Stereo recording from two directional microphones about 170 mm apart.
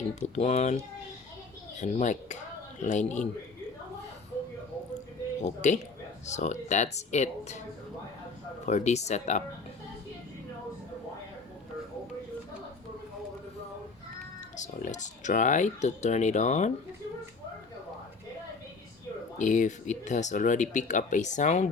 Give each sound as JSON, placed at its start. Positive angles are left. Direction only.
{"t": 0.2, "sound": "speech", "side_deg": 40}
{"t": 1.8, "sound": "speech", "side_deg": 45}
{"t": 5.4, "sound": "speech", "side_deg": 45}
{"t": 8.6, "sound": "speech", "side_deg": 40}
{"t": 14.5, "sound": "speech", "side_deg": 45}
{"t": 19.4, "sound": "speech", "side_deg": 45}